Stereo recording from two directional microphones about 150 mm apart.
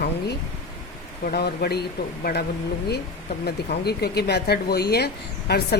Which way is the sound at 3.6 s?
90° left.